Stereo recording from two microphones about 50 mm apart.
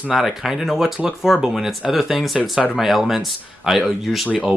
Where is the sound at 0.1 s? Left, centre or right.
Centre.